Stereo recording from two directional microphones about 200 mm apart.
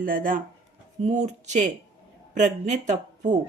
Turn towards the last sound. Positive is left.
turn(degrees=-40)  # may be behind; listen again after turning